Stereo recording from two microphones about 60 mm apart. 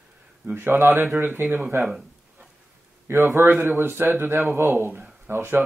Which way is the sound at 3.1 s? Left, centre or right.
Right.